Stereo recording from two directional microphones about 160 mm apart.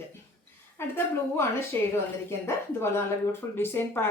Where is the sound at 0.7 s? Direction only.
15° left (ahead or behind).